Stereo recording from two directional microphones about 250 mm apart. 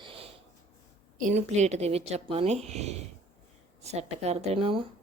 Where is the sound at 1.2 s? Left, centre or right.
Right.